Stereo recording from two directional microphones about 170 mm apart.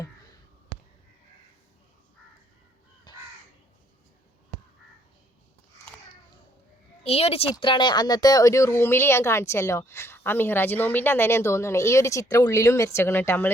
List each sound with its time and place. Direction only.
3.1 s crow: 25° left (ahead or behind)
7.0 s a woman's voice: 35° left (ahead or behind); by 13.5 s 10° left (ahead or behind)